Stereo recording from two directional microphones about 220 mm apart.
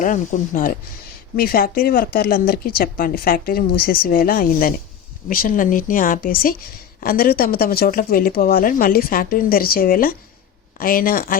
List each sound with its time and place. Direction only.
0.0 s speech: 35° left (ahead or behind)